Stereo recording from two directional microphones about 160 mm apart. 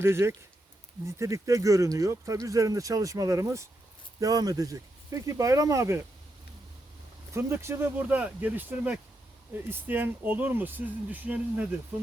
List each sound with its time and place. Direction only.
0.0 s speech: 15° right (ahead or behind)
7.3 s speech: 15° right (ahead or behind)